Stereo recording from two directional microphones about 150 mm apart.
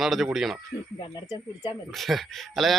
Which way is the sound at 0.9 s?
30° left (ahead or behind).